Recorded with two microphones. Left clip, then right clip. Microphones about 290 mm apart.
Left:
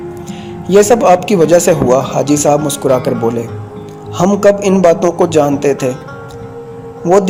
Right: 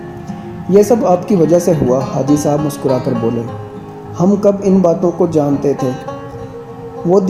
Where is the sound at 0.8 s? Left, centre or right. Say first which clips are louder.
Left 5 dB; left.